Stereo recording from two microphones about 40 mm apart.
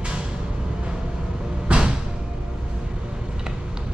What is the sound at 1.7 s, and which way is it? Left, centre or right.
Music, right.